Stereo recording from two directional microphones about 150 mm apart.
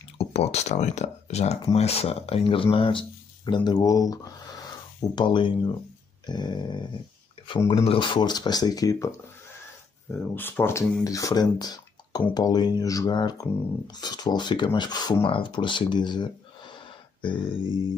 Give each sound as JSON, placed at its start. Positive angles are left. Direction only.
{"t": 0.2, "sound": "speech", "side_deg": 45}
{"t": 10.3, "sound": "speech", "side_deg": 15}
{"t": 16.7, "sound": "a sound", "side_deg": 30}